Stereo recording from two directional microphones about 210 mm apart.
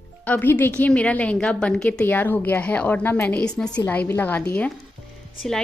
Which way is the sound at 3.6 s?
20° left (ahead or behind).